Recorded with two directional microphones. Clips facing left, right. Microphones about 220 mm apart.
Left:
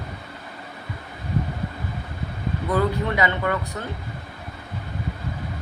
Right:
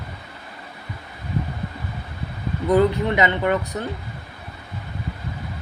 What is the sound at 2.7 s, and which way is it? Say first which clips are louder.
Speech: right 6 dB; 20° right (ahead or behind).